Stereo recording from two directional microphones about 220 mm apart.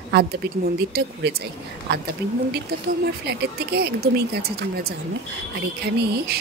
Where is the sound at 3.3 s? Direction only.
45° right (ahead or behind).